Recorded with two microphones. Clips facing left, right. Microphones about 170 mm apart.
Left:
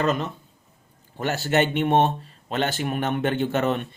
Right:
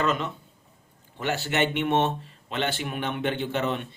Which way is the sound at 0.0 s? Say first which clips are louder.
Left 2 dB; 40° left (ahead or behind).